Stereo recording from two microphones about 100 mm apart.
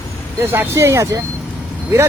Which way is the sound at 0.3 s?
25° right (ahead or behind).